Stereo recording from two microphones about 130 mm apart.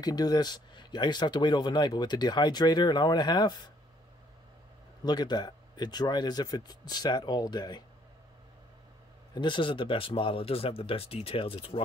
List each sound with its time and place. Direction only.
0.0 s speech: 30° left (ahead or behind)
5.0 s speech: 30° left (ahead or behind)
9.3 s speech: 35° left (ahead or behind)